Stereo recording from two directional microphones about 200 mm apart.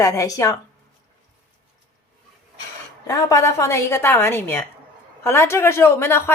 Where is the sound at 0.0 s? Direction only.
15° left (ahead or behind).